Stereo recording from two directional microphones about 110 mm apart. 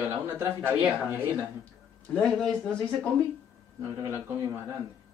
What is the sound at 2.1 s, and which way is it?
Speech, 5° left (ahead or behind).